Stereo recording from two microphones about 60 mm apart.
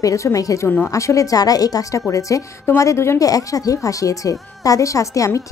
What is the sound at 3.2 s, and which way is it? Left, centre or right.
Speech, left.